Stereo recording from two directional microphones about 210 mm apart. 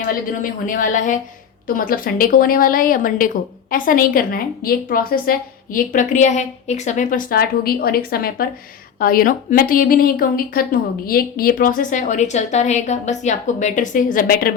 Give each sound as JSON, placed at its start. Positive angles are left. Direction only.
{"t": 0.6, "sound": "a woman's voice", "side_deg": 40}